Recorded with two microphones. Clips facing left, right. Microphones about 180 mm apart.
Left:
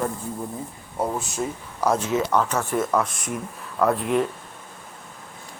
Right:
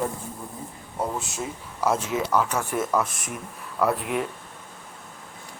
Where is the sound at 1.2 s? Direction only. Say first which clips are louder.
Left 4 dB; centre (ahead or behind).